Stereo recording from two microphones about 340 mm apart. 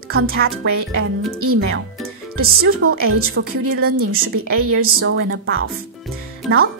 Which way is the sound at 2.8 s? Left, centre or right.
Right.